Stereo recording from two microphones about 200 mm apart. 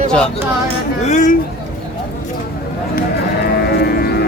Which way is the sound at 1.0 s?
40° left (ahead or behind).